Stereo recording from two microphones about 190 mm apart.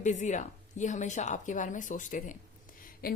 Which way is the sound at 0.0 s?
40° left (ahead or behind).